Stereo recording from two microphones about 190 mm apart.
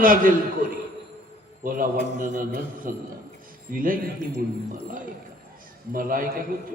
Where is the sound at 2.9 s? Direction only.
45° right (ahead or behind).